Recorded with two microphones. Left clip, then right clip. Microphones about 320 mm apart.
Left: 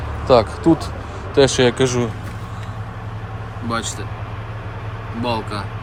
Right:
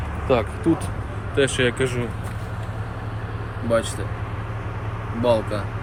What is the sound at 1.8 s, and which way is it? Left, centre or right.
Speech, centre.